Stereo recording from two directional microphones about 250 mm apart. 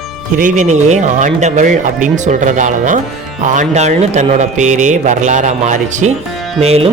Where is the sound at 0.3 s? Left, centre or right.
Right.